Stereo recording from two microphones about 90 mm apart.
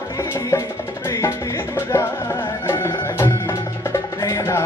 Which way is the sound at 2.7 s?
30° left (ahead or behind).